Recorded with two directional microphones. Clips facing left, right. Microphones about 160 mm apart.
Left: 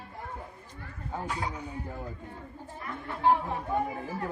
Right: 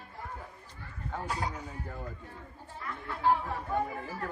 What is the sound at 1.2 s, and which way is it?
Speech, 40° right (ahead or behind).